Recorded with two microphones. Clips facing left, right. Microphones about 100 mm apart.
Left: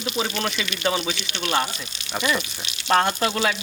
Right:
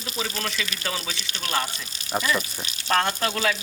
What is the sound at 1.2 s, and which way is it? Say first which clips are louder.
Speech: left 5 dB; 35° right (ahead or behind).